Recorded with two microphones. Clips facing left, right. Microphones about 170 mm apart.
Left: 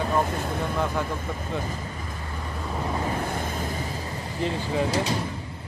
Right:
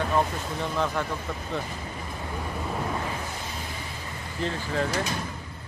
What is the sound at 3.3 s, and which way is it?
Vehicle, 50° left (ahead or behind).